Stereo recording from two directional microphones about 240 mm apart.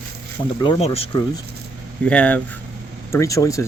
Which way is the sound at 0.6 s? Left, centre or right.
Left.